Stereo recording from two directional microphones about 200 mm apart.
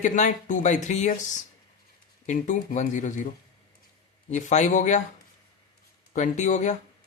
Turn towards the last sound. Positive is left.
turn(degrees=35)  # may be behind; listen again after turning